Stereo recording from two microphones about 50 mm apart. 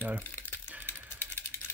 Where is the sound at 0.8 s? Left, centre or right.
Left.